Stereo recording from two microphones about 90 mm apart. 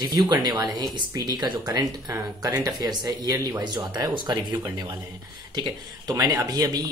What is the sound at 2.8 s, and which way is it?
A man's voice, 50° right (ahead or behind).